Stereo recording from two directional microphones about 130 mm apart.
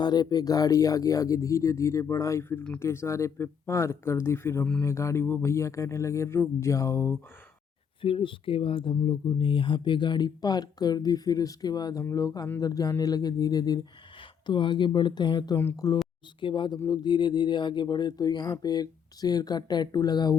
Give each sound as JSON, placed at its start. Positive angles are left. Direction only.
{"t": 0.0, "sound": "speech", "side_deg": 35}
{"t": 8.0, "sound": "speech", "side_deg": 45}
{"t": 16.4, "sound": "speech", "side_deg": 40}